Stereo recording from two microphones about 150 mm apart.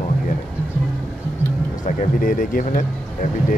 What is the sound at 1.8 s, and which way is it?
Speech, 65° left (ahead or behind).